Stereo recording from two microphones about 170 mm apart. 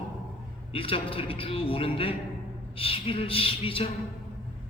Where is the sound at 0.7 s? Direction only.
30° left (ahead or behind).